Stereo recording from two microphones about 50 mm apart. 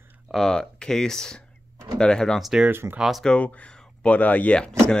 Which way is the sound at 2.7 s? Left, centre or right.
Right.